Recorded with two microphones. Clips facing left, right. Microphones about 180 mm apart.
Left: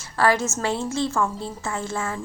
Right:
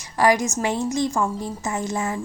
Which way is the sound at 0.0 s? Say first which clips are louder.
Right 2 dB; 15° right (ahead or behind).